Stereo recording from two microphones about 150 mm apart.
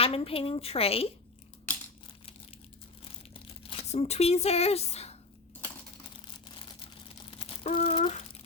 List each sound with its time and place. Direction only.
0.0 s a woman's voice: 40° left (ahead or behind)
1.7 s crumpling: 10° left (ahead or behind)
3.0 s crumpling: 40° left (ahead or behind)
6.5 s a sound: 40° left (ahead or behind)